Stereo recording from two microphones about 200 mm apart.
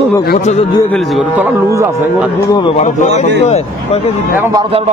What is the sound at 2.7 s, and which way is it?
A man's voice, 35° left (ahead or behind).